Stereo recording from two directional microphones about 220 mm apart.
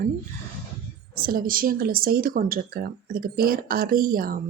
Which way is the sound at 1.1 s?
45° right (ahead or behind).